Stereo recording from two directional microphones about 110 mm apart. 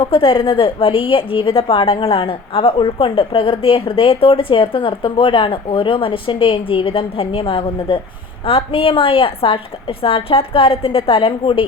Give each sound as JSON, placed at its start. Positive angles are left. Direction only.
{"t": 0.0, "sound": "a woman's voice", "side_deg": 55}